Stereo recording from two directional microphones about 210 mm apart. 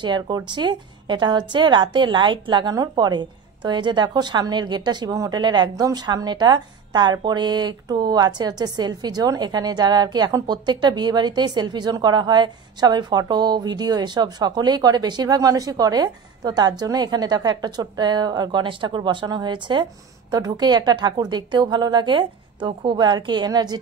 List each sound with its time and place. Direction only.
0.0 s a woman's voice: 20° right (ahead or behind)